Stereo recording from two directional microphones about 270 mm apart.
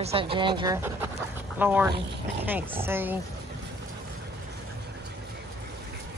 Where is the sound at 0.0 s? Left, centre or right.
Right.